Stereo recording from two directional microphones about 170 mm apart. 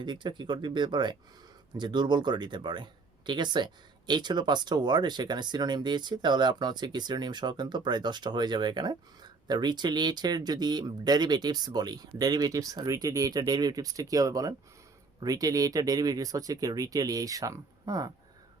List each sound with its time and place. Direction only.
0.0 s speech: 25° right (ahead or behind)